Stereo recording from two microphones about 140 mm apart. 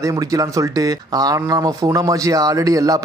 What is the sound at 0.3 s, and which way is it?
Speech, 25° right (ahead or behind).